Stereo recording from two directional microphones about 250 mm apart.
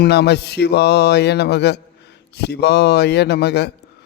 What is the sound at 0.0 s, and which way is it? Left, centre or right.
Music, left.